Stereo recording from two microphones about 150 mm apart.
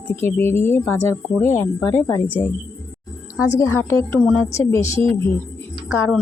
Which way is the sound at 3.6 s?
15° left (ahead or behind).